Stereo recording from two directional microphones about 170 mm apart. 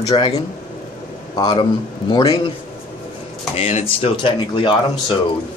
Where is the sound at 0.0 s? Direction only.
25° left (ahead or behind).